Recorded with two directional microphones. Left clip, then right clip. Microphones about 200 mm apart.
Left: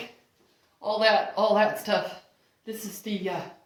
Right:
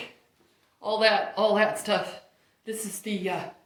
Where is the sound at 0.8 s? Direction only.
20° left (ahead or behind).